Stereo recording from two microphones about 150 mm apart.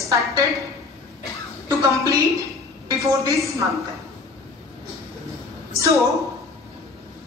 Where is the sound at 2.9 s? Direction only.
20° right (ahead or behind).